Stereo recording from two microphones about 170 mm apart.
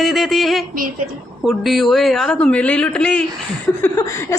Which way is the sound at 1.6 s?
Centre (ahead or behind).